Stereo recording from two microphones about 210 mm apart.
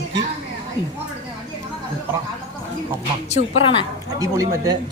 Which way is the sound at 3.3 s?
25° left (ahead or behind).